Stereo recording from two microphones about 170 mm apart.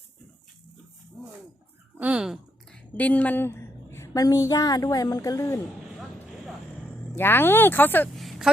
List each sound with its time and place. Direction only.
2.0 s a woman's voice: 5° right (ahead or behind); by 5.5 s 20° left (ahead or behind)
6.0 s a sound: centre (ahead or behind)
7.2 s speech: 10° left (ahead or behind)
8.1 s a woman's voice: centre (ahead or behind)